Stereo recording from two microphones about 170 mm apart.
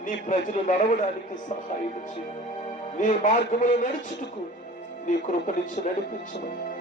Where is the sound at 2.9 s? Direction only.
45° left (ahead or behind).